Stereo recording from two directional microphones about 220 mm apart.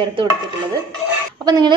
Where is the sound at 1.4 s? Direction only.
20° right (ahead or behind).